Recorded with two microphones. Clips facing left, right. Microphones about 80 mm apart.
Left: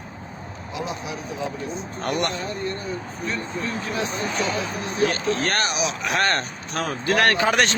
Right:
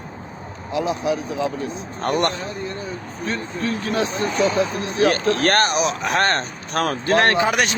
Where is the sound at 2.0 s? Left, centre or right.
Right.